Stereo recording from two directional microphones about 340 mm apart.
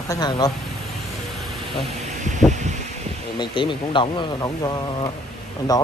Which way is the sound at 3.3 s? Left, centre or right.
Centre.